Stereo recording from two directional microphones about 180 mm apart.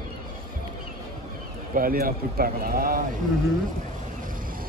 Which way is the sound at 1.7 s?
55° right (ahead or behind).